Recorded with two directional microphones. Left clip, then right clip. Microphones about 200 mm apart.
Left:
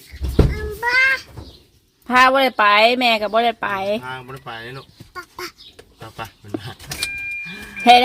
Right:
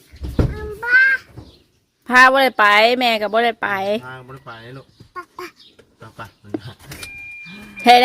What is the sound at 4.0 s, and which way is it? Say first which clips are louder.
Speech: left 4 dB; 25° left (ahead or behind).